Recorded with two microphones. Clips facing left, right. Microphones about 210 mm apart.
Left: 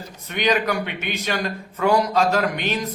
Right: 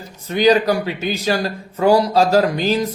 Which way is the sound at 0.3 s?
30° right (ahead or behind).